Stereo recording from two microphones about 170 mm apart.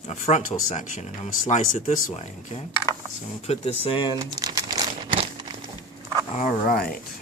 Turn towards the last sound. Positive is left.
turn(degrees=60)  # may be behind; listen again after turning